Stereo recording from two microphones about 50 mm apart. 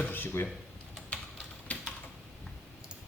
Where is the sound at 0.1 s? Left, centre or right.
Left.